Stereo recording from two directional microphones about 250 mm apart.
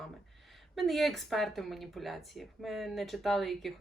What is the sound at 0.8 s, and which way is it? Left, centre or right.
Speech, centre.